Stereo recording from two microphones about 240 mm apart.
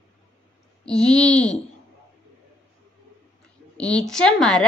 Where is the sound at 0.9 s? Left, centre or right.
Centre.